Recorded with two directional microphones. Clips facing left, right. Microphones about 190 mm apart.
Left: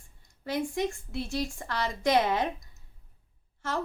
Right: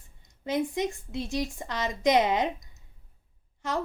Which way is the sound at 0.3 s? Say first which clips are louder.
Right 3 dB; 20° right (ahead or behind).